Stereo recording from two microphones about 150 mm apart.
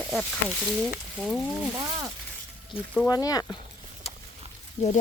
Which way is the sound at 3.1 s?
25° left (ahead or behind).